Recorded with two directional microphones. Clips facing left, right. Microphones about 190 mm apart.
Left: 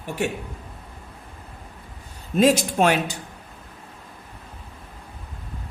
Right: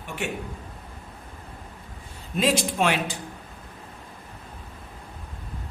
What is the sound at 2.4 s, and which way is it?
Speech, 45° left (ahead or behind).